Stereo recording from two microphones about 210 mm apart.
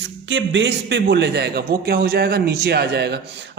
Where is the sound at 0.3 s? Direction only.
60° right (ahead or behind).